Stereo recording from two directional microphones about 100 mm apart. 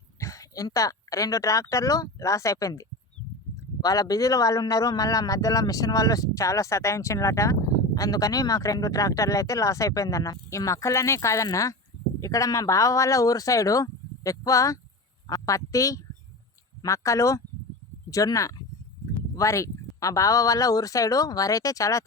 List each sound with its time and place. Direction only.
0.2 s speech: 35° left (ahead or behind)